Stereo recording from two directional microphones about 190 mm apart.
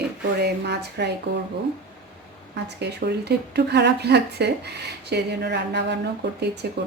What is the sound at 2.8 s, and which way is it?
A woman's voice, 60° right (ahead or behind).